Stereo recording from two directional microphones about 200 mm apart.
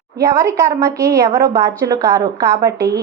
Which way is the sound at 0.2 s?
15° right (ahead or behind).